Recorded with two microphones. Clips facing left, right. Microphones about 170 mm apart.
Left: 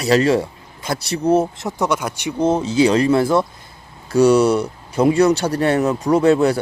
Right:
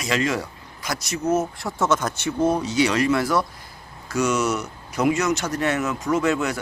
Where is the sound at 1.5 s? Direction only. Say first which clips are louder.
Left 2 dB; 20° left (ahead or behind).